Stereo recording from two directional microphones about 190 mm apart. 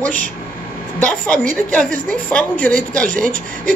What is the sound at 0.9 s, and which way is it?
Speech, 5° left (ahead or behind).